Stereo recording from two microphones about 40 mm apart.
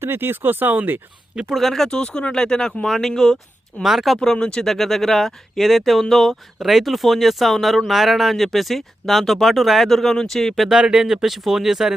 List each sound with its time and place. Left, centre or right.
0.0 s speech: right
1.5 s speech: centre
1.9 s speech: left
3.2 s speech: centre
4.4 s speech: left
4.6 s speech: centre
6.6 s speech: centre
10.7 s speech: centre